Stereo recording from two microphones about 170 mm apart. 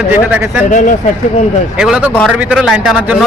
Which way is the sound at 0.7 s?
45° left (ahead or behind).